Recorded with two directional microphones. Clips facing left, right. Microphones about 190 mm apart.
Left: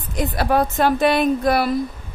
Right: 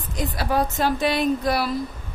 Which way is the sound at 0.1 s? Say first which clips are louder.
Left 5 dB; 60° left (ahead or behind).